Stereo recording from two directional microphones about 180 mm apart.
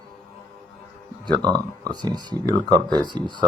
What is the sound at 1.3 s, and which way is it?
Speech, 20° right (ahead or behind).